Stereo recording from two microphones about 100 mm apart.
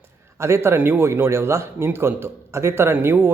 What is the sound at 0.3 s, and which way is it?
A man's voice, 25° right (ahead or behind).